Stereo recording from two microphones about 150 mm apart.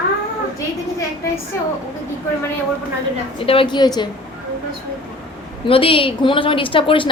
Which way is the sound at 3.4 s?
35° left (ahead or behind).